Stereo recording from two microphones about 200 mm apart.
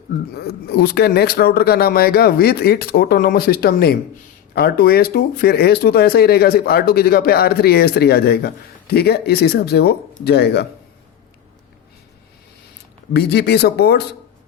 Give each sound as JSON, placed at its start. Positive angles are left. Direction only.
{"t": 0.3, "sound": "speech", "side_deg": 55}
{"t": 13.1, "sound": "speech", "side_deg": 55}